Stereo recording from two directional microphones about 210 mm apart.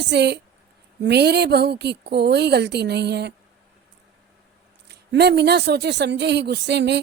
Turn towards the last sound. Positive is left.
turn(degrees=-55)  # may be behind; listen again after turning